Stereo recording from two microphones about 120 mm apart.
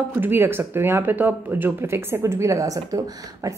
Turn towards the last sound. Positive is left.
turn(degrees=-30)  # may be behind; listen again after turning